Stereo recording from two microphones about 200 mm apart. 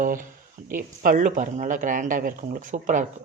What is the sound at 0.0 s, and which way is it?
Speech, 40° right (ahead or behind).